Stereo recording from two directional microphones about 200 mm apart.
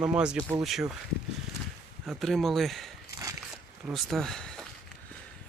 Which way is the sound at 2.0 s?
Centre (ahead or behind).